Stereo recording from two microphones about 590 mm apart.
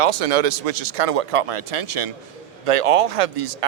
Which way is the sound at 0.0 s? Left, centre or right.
Right.